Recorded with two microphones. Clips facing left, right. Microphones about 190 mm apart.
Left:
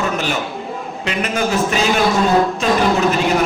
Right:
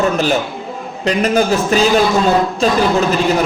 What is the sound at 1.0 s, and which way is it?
Speech, 35° right (ahead or behind).